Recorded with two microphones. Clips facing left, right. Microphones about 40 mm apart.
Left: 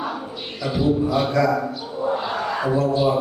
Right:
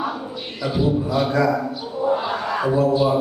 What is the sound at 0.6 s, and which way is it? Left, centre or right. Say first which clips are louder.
A man's voice: left 1 dB; centre.